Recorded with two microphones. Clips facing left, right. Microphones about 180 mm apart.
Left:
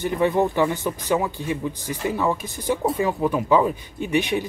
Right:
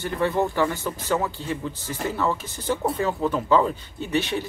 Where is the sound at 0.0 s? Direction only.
15° left (ahead or behind).